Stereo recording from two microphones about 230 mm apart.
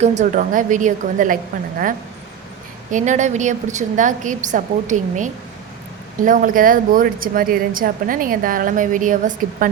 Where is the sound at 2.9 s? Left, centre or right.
Right.